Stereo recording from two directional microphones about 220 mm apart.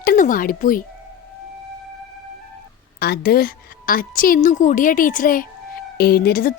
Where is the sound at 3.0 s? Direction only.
45° left (ahead or behind).